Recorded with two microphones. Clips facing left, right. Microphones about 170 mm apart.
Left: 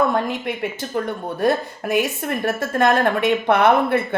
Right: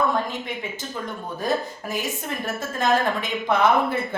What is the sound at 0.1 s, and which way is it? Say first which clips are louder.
A woman's voice: left 4 dB; 65° left (ahead or behind).